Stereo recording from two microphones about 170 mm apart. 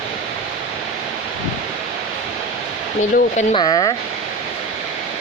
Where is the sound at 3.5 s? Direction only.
25° left (ahead or behind).